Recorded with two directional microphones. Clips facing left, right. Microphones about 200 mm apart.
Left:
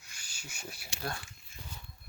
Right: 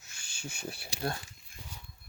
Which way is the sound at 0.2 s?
25° right (ahead or behind).